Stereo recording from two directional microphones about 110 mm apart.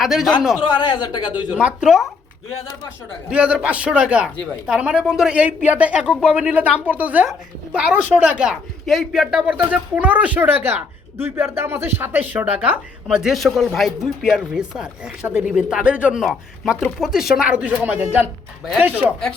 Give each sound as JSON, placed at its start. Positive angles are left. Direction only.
{"t": 0.0, "sound": "speech", "side_deg": -5}
{"t": 0.6, "sound": "speech", "side_deg": 45}
{"t": 1.3, "sound": "a woman's voice", "side_deg": -15}
{"t": 3.2, "sound": "a woman's voice", "side_deg": -10}
{"t": 13.1, "sound": "a woman's voice", "side_deg": -5}
{"t": 16.2, "sound": "a woman's voice", "side_deg": 0}